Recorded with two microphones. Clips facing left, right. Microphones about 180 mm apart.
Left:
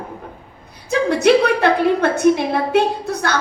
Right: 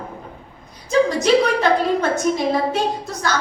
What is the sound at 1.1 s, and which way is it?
A woman's voice, 60° left (ahead or behind).